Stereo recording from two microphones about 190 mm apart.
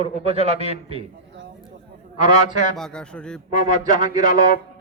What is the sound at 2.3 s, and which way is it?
Speech, 40° left (ahead or behind).